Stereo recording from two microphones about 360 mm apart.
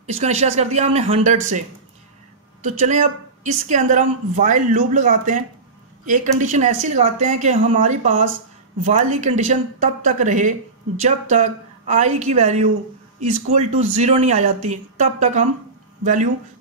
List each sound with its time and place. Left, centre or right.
0.0 s speech: centre
2.6 s speech: centre